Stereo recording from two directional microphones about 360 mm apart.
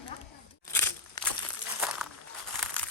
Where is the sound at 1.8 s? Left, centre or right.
Centre.